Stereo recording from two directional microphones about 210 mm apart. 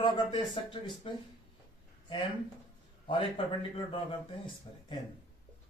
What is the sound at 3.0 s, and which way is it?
Speech, 25° left (ahead or behind).